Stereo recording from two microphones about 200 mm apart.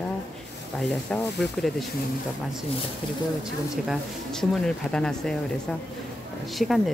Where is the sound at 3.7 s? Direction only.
Centre (ahead or behind).